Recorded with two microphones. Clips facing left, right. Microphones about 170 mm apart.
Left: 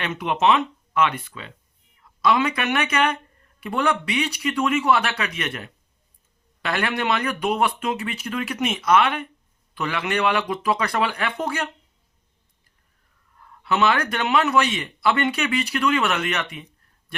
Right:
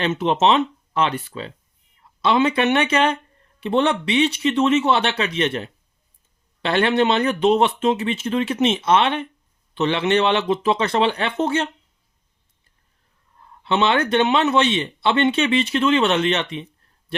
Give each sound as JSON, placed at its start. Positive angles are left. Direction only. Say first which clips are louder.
{"t": 0.0, "sound": "speech", "louder": "right 3 dB", "side_deg": -30}
{"t": 13.4, "sound": "speech", "louder": "right 1 dB", "side_deg": -25}